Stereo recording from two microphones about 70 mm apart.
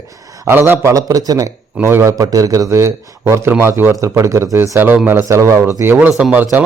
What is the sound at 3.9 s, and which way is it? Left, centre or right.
A man's voice, right.